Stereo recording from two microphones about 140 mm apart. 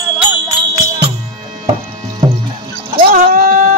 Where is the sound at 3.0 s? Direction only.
85° right; by 3.7 s 70° right (ahead or behind).